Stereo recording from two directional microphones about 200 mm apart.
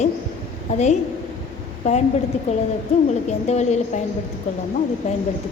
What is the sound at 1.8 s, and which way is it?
Speech, 35° left (ahead or behind).